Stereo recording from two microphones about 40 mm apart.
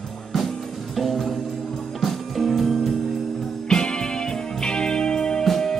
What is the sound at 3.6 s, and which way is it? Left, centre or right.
Music, left.